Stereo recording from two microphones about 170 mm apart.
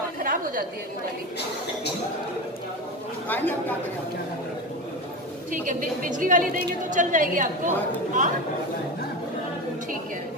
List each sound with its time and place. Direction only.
0.2 s a sound: 55° right (ahead or behind)
3.3 s speech: 10° left (ahead or behind)
5.5 s a woman's voice: 50° right (ahead or behind)